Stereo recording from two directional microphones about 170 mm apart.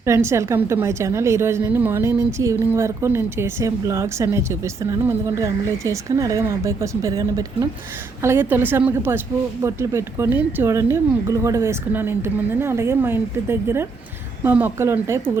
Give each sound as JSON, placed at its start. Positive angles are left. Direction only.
{"t": 0.0, "sound": "a woman's voice", "side_deg": -15}